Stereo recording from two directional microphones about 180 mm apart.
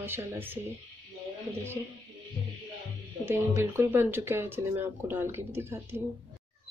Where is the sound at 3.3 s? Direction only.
15° right (ahead or behind).